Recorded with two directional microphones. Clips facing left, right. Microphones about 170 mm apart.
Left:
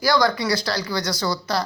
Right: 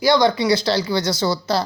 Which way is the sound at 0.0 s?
20° right (ahead or behind).